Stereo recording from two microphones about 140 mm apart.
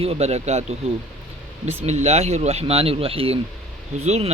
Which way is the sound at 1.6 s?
50° right (ahead or behind).